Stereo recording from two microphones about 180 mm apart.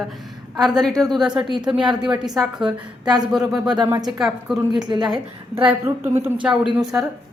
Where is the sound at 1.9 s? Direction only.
5° right (ahead or behind).